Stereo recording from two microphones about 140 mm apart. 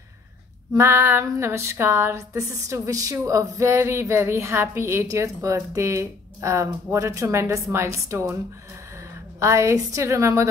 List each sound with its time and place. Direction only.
0.7 s speech: 15° right (ahead or behind)
9.4 s speech: 20° right (ahead or behind)